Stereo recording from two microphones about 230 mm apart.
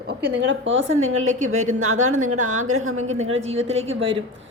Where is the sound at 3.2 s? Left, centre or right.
Right.